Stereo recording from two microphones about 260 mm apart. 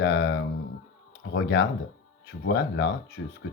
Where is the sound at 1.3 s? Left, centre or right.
Left.